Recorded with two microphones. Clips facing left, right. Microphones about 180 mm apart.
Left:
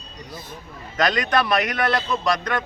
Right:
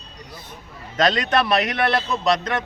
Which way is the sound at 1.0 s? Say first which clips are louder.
Right 1 dB; 25° right (ahead or behind).